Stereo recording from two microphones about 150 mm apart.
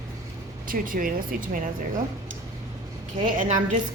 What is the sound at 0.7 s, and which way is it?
Speech, 70° right (ahead or behind).